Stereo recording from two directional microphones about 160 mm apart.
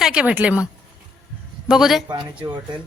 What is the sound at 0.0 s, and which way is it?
A man's voice, 5° right (ahead or behind).